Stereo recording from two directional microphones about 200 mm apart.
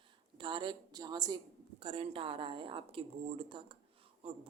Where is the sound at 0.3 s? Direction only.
25° right (ahead or behind).